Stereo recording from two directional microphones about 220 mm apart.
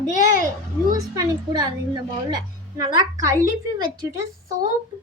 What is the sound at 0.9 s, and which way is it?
A woman's voice, 15° right (ahead or behind).